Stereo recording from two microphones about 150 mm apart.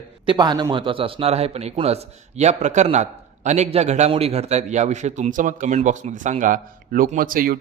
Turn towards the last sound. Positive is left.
turn(degrees=-70)  # may be behind; listen again after turning